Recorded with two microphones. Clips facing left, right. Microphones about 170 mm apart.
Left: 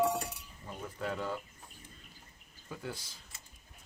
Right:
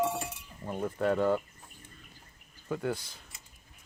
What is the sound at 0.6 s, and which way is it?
Speech, 55° right (ahead or behind).